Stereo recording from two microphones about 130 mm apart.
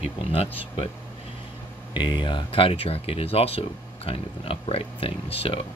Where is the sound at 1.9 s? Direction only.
35° left (ahead or behind).